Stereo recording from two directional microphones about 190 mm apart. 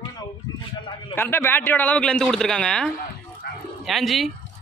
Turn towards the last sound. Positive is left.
turn(degrees=0)  # may be behind; listen again after turning